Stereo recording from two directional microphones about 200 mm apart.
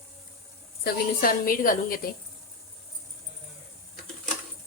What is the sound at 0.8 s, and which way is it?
A woman's voice, 45° left (ahead or behind).